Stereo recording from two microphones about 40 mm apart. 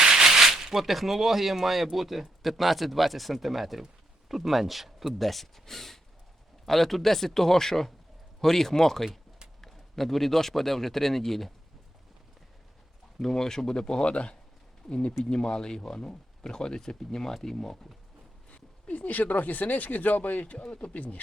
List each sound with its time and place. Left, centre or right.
0.0 s a man's voice: centre
13.1 s speech: centre
18.9 s speech: left
20.6 s speech: left